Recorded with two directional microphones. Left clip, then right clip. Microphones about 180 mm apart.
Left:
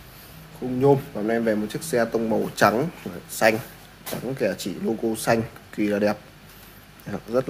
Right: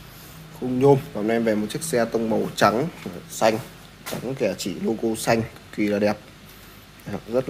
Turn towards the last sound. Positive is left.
turn(degrees=0)  # may be behind; listen again after turning